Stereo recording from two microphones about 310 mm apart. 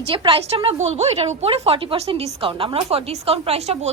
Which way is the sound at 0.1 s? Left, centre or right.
Centre.